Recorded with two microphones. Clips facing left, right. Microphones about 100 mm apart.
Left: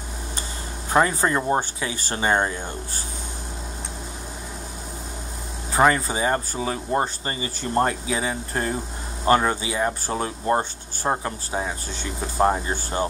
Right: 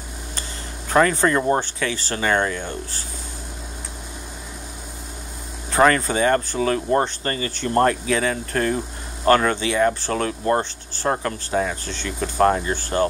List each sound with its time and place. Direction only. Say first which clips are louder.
0.8 s speech: right 3 dB; 20° left (ahead or behind)
5.7 s speech: right 2 dB; 10° left (ahead or behind)